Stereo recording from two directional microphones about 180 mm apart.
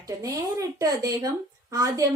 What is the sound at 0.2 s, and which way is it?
A woman's voice, 20° right (ahead or behind).